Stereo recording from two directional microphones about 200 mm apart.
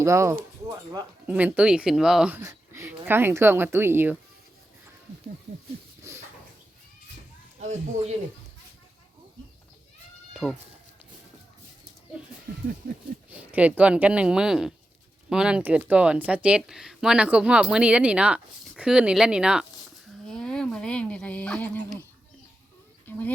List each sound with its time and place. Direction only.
0.0 s speech: 15° right (ahead or behind)
7.6 s a man's voice: 35° right (ahead or behind)
10.3 s speech: centre (ahead or behind)
13.3 s speech: 5° right (ahead or behind)
23.1 s speech: 10° left (ahead or behind)